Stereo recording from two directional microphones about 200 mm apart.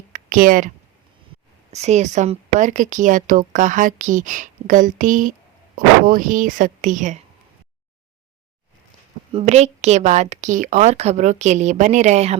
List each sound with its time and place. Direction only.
0.1 s a sound: 45° right (ahead or behind)
1.7 s speech: 35° right (ahead or behind)
9.3 s speech: 35° right (ahead or behind)